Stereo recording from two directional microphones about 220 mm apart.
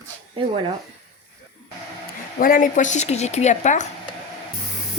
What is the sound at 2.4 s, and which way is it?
A woman's voice, 35° left (ahead or behind).